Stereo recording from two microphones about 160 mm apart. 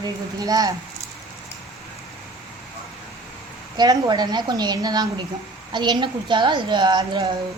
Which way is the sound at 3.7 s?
25° right (ahead or behind).